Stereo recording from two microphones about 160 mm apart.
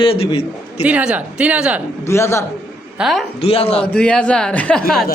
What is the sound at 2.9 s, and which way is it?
Speech, centre (ahead or behind).